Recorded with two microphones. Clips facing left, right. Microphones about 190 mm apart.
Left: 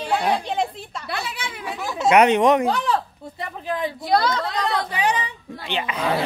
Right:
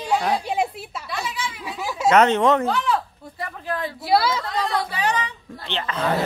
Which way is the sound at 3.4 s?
20° left (ahead or behind).